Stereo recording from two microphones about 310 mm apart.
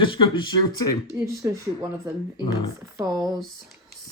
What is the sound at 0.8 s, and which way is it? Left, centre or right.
Speech, left.